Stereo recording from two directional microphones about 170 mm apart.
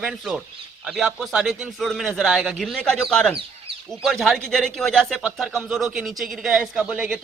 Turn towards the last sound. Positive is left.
turn(degrees=-5)  # may be behind; listen again after turning